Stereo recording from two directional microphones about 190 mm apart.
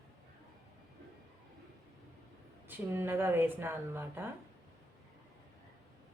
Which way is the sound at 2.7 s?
10° right (ahead or behind).